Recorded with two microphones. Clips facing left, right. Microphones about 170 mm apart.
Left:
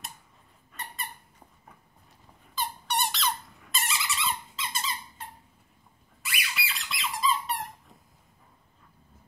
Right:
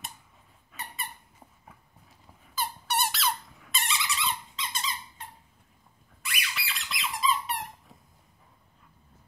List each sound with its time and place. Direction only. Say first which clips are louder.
0.7 s squeak: even; centre (ahead or behind)
2.5 s squeak: even; 5° right (ahead or behind)
6.2 s squeak: left 1 dB; centre (ahead or behind)